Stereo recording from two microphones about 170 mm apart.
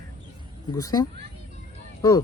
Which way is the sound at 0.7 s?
20° left (ahead or behind).